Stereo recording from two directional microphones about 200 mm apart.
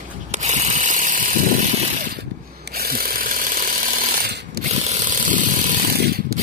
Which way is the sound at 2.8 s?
50° right (ahead or behind).